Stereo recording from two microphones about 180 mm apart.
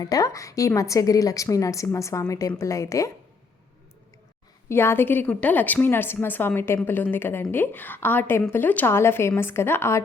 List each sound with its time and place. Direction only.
0.0 s a woman's voice: 20° left (ahead or behind)
4.7 s a woman's voice: 15° left (ahead or behind)